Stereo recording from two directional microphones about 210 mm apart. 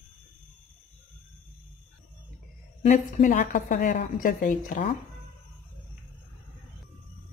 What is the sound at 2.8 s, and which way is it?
Speech, 40° left (ahead or behind).